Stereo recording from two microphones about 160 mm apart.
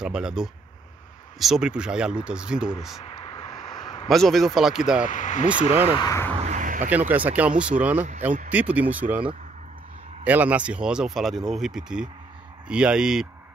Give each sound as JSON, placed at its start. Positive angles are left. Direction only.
{"t": 0.0, "sound": "speech", "side_deg": -5}
{"t": 3.2, "sound": "a sound", "side_deg": 30}
{"t": 4.1, "sound": "speech", "side_deg": 0}
{"t": 5.0, "sound": "speech", "side_deg": 50}
{"t": 5.7, "sound": "speech", "side_deg": -10}
{"t": 5.9, "sound": "speech", "side_deg": 20}
{"t": 6.4, "sound": "a sound", "side_deg": -50}
{"t": 6.9, "sound": "speech", "side_deg": -10}